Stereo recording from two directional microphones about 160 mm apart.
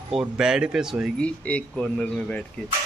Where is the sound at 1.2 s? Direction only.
10° left (ahead or behind).